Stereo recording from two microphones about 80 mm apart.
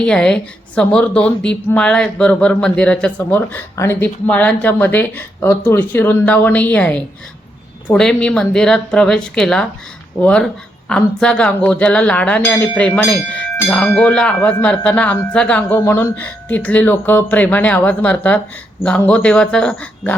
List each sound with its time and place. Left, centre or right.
0.0 s speech: centre
3.8 s speech: left
4.3 s speech: centre
15.8 s speech: left
16.1 s speech: left